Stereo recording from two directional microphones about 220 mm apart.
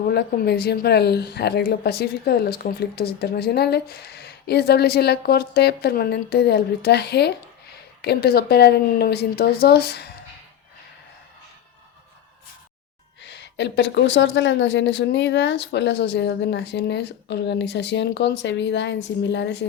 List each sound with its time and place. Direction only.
0.1 s a woman's voice: 45° left (ahead or behind)
13.2 s a woman's voice: 55° left (ahead or behind)